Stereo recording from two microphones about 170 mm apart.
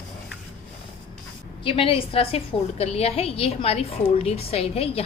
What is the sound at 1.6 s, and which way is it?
A woman's voice, 30° left (ahead or behind).